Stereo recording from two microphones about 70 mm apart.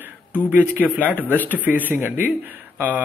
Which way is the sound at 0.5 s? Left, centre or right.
Right.